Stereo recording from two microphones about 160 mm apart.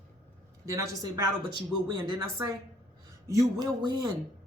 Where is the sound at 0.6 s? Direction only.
20° right (ahead or behind).